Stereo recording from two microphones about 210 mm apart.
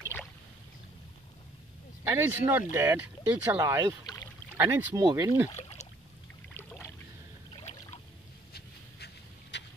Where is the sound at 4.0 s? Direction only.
20° left (ahead or behind).